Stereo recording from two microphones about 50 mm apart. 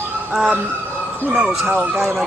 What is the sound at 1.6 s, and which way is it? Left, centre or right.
Speech, right.